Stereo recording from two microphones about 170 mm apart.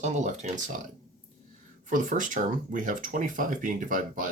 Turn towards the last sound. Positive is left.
turn(degrees=-50)  # may be behind; listen again after turning